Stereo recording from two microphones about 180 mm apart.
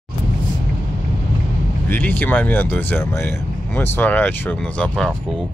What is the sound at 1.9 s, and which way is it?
Speech, 10° left (ahead or behind).